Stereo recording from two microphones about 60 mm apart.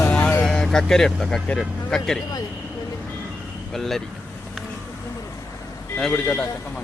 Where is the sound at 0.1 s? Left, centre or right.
Left.